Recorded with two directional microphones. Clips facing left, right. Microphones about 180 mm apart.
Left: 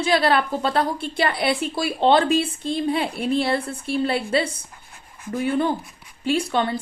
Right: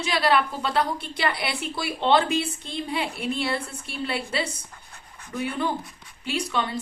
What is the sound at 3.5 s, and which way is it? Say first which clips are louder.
Speech: left 8 dB; 30° left (ahead or behind).